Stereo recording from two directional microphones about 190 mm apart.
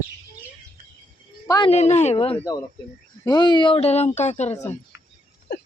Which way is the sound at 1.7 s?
35° left (ahead or behind).